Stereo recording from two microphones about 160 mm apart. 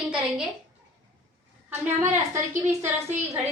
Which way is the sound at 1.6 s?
15° right (ahead or behind).